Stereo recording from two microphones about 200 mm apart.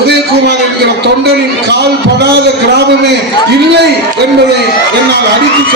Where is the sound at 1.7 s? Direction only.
55° right (ahead or behind).